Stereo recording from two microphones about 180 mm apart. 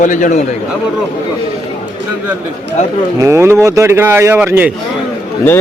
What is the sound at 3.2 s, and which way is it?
A man's voice, 15° right (ahead or behind).